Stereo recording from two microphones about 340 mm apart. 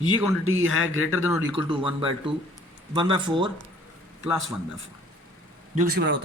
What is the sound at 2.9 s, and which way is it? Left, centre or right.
Speech, centre.